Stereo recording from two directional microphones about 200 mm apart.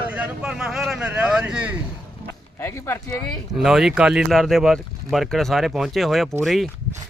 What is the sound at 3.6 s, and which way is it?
Speech, centre (ahead or behind).